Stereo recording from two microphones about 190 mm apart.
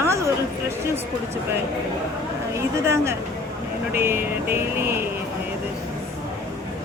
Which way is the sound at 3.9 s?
10° right (ahead or behind).